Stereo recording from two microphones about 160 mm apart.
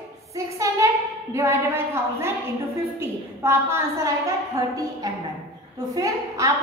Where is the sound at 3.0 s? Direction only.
15° right (ahead or behind).